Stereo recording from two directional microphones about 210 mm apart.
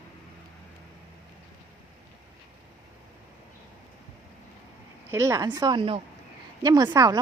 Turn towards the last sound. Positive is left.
turn(degrees=-20)  # may be behind; listen again after turning